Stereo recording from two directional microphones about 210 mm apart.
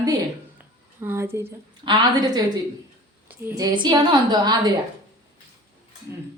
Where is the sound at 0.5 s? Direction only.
10° right (ahead or behind).